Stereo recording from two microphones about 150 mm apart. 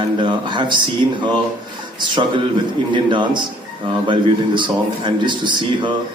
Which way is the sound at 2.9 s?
30° right (ahead or behind).